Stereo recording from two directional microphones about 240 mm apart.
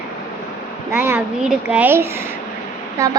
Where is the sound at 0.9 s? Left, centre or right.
Centre.